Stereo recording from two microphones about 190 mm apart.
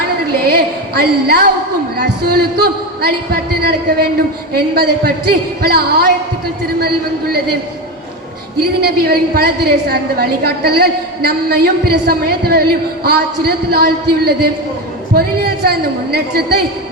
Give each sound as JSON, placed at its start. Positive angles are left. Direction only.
{"t": 0.4, "sound": "a sound", "side_deg": -55}
{"t": 2.0, "sound": "a woman's voice", "side_deg": -55}
{"t": 8.8, "sound": "a woman's voice", "side_deg": -55}